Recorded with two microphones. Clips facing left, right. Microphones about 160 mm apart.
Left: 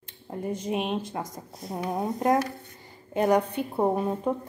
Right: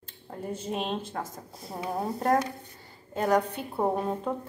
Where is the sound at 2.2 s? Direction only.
10° left (ahead or behind).